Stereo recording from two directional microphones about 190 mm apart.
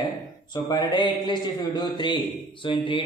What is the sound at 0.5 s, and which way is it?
A man's voice, 20° left (ahead or behind).